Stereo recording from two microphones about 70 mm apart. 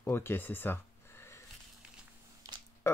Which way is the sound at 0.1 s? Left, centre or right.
Left.